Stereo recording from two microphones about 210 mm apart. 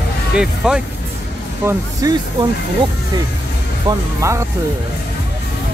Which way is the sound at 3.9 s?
15° right (ahead or behind).